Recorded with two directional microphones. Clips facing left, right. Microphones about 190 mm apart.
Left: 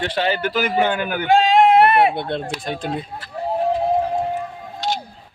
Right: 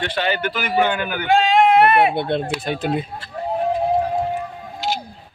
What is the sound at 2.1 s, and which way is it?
Speech, 5° right (ahead or behind).